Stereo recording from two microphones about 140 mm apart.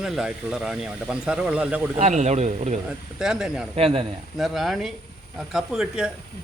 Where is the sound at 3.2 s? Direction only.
5° right (ahead or behind).